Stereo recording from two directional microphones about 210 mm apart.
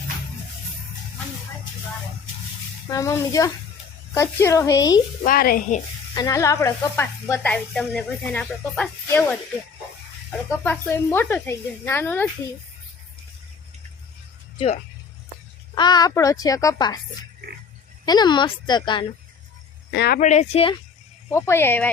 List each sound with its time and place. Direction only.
2.9 s speech: 15° left (ahead or behind)
5.2 s speech: 45° left (ahead or behind)
6.1 s speech: 15° left (ahead or behind)
10.6 s speech: 10° left (ahead or behind)
15.7 s speech: 20° left (ahead or behind)
18.0 s a woman's voice: 20° left (ahead or behind)
19.9 s speech: 55° left (ahead or behind)
20.1 s speech: 35° left (ahead or behind)
21.2 s speech: 10° left (ahead or behind)